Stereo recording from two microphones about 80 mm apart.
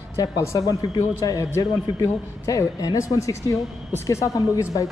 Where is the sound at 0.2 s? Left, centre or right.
Left.